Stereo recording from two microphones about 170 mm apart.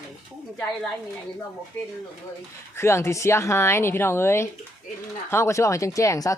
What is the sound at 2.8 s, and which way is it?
A woman's voice, 15° left (ahead or behind).